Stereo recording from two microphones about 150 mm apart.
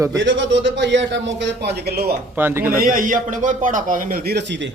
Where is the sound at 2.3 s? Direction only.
15° right (ahead or behind).